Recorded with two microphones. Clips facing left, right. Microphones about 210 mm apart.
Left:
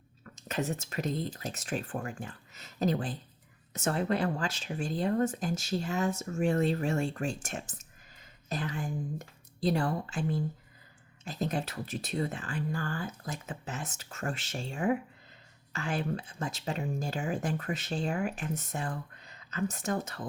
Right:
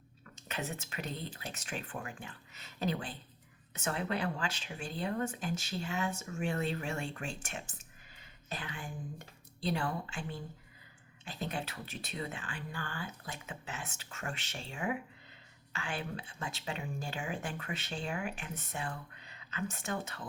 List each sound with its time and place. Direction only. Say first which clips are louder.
0.3 s speech: left 7 dB; 40° left (ahead or behind)